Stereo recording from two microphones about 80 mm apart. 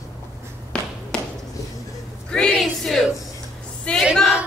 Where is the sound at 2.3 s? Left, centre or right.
Centre.